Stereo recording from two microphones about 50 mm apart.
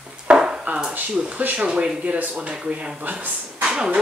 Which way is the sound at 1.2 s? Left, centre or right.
Centre.